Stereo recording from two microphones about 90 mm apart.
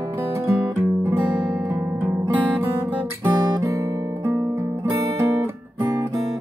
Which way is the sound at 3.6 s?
35° right (ahead or behind).